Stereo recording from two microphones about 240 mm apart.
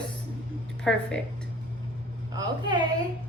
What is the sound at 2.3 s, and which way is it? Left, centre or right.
Speech, centre.